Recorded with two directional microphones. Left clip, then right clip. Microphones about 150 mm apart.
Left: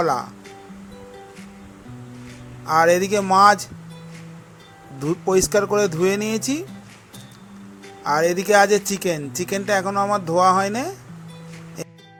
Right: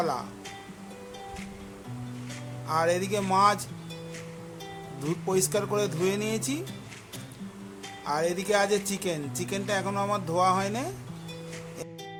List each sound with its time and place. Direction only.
0.0 s speech: 45° left (ahead or behind)
2.6 s speech: 45° left (ahead or behind)
4.9 s speech: 40° left (ahead or behind)
8.0 s speech: 40° left (ahead or behind)